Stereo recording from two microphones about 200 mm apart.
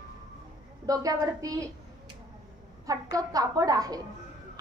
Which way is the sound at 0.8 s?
15° right (ahead or behind).